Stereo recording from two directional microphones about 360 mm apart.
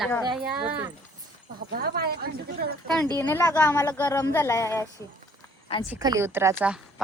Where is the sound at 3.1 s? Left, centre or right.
Centre.